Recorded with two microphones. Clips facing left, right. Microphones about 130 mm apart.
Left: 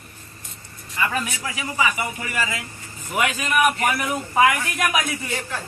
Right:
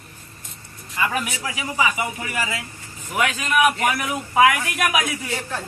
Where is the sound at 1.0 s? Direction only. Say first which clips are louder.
Right 1 dB; 10° right (ahead or behind).